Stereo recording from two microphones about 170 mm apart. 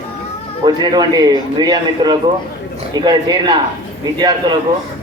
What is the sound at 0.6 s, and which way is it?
A man's voice, 25° right (ahead or behind).